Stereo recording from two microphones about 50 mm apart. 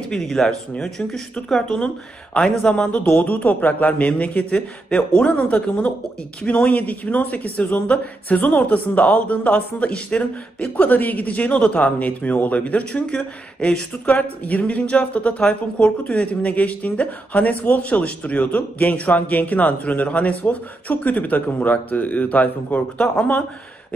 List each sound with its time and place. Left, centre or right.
0.1 s speech: centre; by 23.4 s left